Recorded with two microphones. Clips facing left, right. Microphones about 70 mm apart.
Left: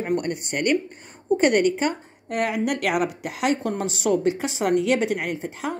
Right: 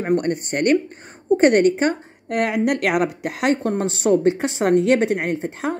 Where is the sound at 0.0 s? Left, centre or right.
Right.